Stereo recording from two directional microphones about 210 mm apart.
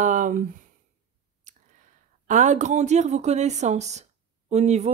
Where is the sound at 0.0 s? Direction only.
40° right (ahead or behind).